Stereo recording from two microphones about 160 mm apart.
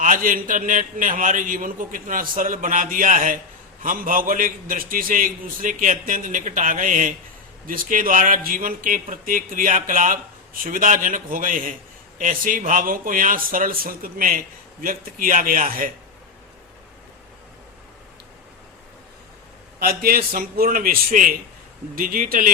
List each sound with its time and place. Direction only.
0.0 s speech: 55° right (ahead or behind)
19.8 s speech: 70° right (ahead or behind)